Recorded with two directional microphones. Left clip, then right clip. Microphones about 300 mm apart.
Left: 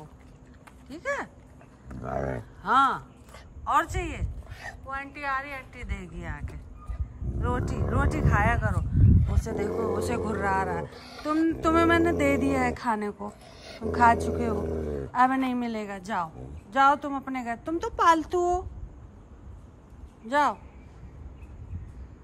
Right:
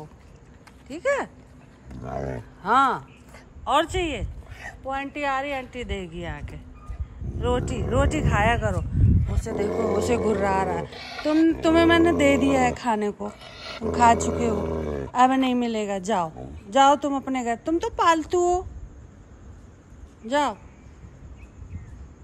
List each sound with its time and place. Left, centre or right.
0.8 s speech: centre
1.9 s a woman's voice: centre
20.2 s a woman's voice: centre